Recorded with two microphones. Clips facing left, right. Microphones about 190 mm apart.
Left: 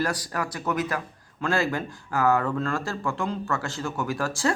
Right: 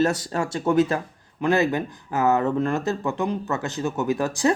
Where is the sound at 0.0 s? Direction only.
25° right (ahead or behind).